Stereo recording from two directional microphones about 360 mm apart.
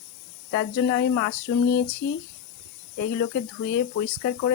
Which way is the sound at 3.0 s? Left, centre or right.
Left.